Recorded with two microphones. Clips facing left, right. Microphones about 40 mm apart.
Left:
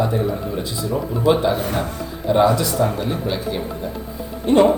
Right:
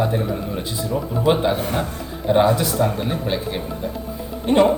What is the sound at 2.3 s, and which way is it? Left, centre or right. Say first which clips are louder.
Speech: even; right.